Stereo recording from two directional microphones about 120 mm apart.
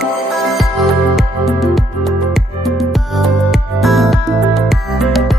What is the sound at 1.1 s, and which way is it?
Music, centre (ahead or behind).